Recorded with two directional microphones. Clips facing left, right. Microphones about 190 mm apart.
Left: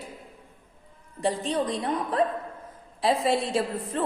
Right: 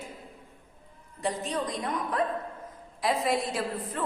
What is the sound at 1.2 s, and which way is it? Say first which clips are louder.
A woman's voice: left 4 dB; 30° left (ahead or behind).